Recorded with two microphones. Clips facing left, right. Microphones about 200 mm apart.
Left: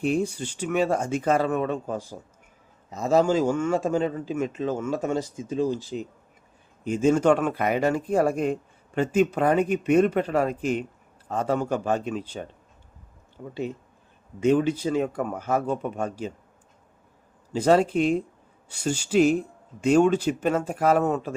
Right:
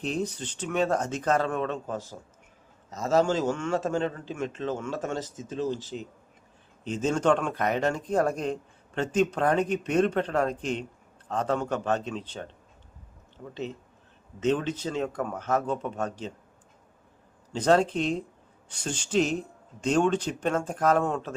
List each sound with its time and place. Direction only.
0.0 s speech: 10° left (ahead or behind)
5.7 s speech: 45° left (ahead or behind)
6.8 s speech: 10° left (ahead or behind)
17.5 s speech: 10° left (ahead or behind)